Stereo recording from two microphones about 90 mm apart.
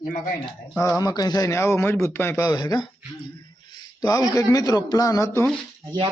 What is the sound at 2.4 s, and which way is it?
Speech, 45° left (ahead or behind).